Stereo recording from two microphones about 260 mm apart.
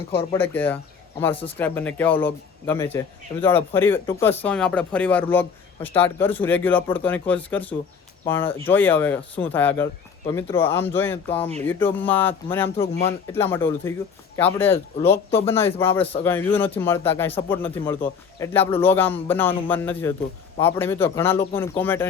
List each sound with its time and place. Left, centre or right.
0.1 s speech: centre